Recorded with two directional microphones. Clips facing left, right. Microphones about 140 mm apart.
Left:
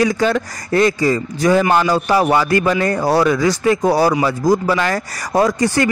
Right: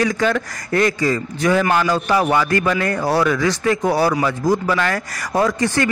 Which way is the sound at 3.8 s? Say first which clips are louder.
Left 2 dB; 35° left (ahead or behind).